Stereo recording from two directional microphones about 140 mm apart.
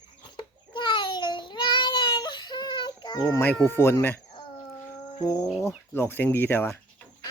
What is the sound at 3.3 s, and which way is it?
Speech, 15° left (ahead or behind).